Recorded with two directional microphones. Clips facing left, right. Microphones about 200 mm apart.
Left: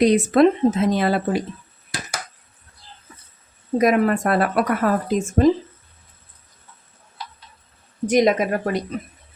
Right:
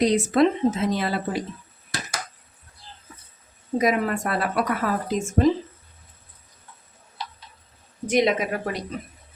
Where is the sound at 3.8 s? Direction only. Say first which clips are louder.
Left 6 dB; 55° left (ahead or behind).